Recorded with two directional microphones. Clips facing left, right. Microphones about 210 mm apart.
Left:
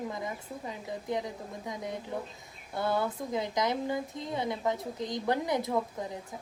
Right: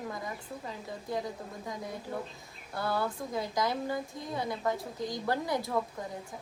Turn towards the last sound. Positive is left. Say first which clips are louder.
# left 2 dB
turn(degrees=20)  # may be behind; listen again after turning